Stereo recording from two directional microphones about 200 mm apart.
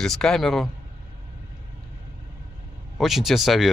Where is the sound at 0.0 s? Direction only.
5° left (ahead or behind).